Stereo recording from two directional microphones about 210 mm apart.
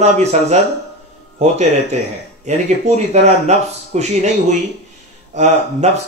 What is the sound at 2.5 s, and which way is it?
Speech, 35° right (ahead or behind).